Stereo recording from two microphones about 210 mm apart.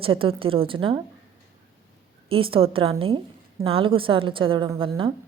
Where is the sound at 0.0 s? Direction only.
25° right (ahead or behind).